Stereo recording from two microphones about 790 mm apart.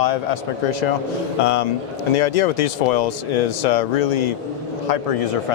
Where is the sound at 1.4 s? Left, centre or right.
Left.